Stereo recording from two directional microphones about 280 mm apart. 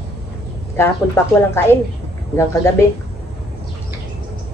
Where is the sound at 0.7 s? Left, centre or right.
Centre.